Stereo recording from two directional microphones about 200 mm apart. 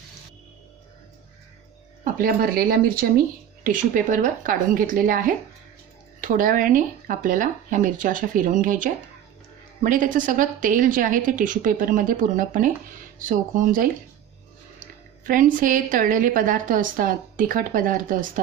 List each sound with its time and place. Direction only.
2.1 s a woman's voice: 45° right (ahead or behind)
15.3 s a woman's voice: 40° right (ahead or behind)